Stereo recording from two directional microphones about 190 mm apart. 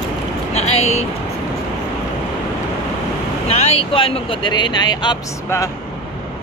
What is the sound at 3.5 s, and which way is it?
Speech, 35° left (ahead or behind).